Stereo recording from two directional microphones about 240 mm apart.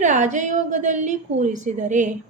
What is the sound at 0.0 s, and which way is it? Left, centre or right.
A woman's voice, right.